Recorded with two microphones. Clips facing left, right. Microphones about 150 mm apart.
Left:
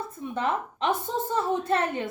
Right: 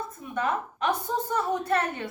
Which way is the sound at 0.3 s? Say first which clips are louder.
Even; 25° left (ahead or behind).